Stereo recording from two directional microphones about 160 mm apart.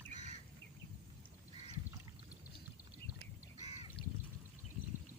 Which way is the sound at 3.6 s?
45° left (ahead or behind).